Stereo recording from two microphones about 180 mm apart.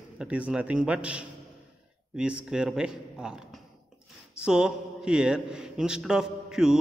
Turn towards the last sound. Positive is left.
turn(degrees=-5)  # may be behind; listen again after turning